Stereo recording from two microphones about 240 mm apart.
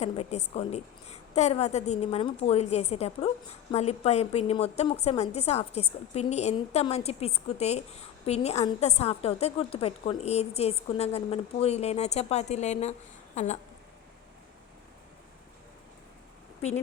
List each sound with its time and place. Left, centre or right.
0.0 s a woman's voice: left